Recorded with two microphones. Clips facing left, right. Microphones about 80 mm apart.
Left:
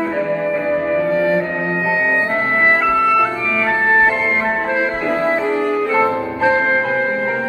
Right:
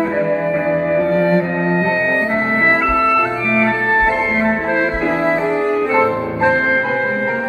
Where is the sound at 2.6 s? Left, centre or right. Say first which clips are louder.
Left 1 dB; centre.